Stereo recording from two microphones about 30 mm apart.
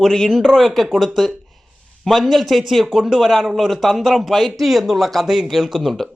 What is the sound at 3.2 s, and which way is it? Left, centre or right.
A man's voice, centre.